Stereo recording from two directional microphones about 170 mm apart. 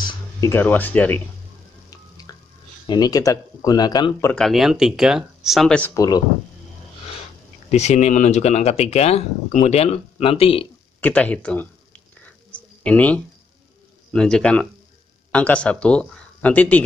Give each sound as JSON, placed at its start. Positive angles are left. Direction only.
{"t": 0.0, "sound": "speech", "side_deg": 15}
{"t": 2.3, "sound": "a sound", "side_deg": 20}
{"t": 2.9, "sound": "speech", "side_deg": 20}
{"t": 4.3, "sound": "speech", "side_deg": 0}
{"t": 7.7, "sound": "speech", "side_deg": 40}
{"t": 11.0, "sound": "speech", "side_deg": 10}
{"t": 12.4, "sound": "a sound", "side_deg": 10}
{"t": 14.1, "sound": "speech", "side_deg": 5}